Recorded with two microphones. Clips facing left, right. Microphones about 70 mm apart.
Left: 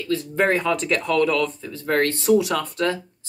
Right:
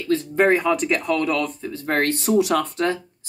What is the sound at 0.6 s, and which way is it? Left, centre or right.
Speech, centre.